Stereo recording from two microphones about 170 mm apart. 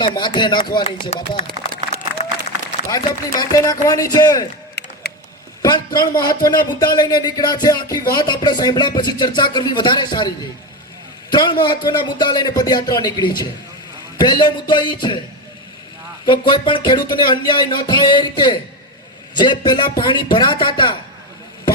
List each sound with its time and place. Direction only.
0.0 s speech: 25° left (ahead or behind)
2.2 s applause: 40° left (ahead or behind)
3.3 s speech: 20° left (ahead or behind)
4.8 s a sound: 75° left (ahead or behind)
5.6 s speech: 25° left (ahead or behind)
16.2 s speech: 25° left (ahead or behind)